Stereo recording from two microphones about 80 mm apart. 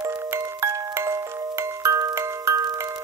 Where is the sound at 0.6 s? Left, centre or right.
Right.